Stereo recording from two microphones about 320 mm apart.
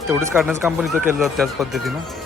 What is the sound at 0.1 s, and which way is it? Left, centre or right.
Speech, centre.